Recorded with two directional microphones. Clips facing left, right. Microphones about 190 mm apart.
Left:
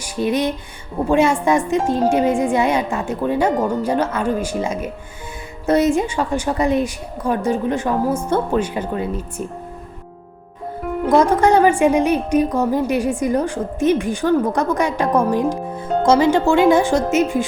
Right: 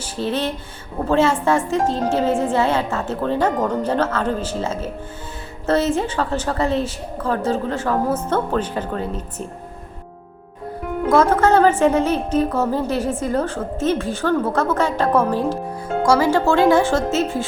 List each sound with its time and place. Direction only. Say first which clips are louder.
0.0 s a woman's voice: left 3 dB; 15° left (ahead or behind)
11.0 s a woman's voice: left 1 dB; 15° left (ahead or behind)